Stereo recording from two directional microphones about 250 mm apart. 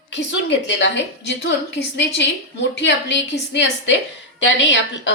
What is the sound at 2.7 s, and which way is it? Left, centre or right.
A woman's voice, left.